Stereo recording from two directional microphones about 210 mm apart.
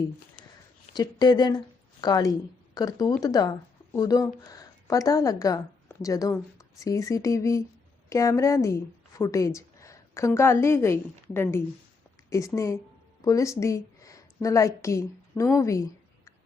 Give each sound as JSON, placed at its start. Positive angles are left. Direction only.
{"t": 0.9, "sound": "a woman's voice", "side_deg": 20}